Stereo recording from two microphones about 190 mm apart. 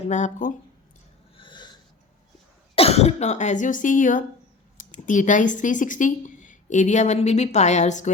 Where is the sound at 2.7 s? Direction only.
30° left (ahead or behind).